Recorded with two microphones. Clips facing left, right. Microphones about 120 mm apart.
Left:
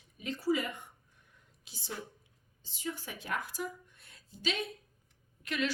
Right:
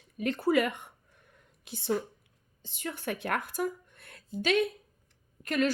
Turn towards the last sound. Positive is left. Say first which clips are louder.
# right 6 dB
turn(degrees=-45)  # may be behind; listen again after turning